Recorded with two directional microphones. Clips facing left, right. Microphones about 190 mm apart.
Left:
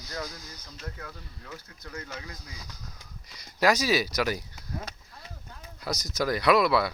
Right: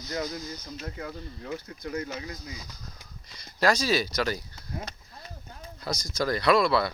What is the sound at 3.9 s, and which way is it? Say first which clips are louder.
Speech: even; 10° left (ahead or behind).